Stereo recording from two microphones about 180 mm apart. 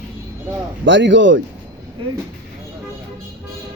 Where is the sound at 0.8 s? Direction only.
90° right.